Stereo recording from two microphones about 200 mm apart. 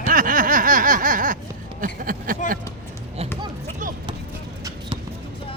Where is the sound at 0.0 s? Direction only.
40° right (ahead or behind).